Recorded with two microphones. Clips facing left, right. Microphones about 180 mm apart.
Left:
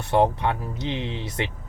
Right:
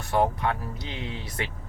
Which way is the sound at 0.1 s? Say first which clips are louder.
Left 4 dB; 25° left (ahead or behind).